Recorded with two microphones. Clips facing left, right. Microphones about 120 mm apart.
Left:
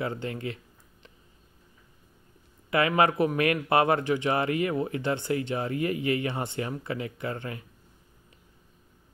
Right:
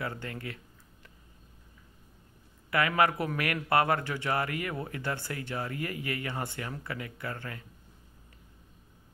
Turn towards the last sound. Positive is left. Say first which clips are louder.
# left 5 dB
turn(degrees=20)  # may be behind; listen again after turning